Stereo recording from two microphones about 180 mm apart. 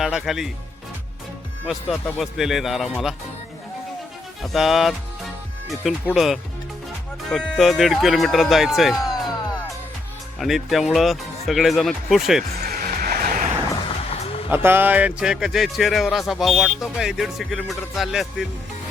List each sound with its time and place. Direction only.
0.0 s speech: centre (ahead or behind)
1.6 s speech: centre (ahead or behind)
4.4 s speech: centre (ahead or behind)
6.1 s speech: centre (ahead or behind)
12.6 s music: 55° right (ahead or behind)
14.1 s a sound: 35° left (ahead or behind)
14.5 s speech: 10° right (ahead or behind)